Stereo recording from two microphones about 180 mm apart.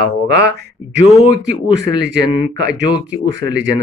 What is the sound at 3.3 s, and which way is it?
Speech, 90° right.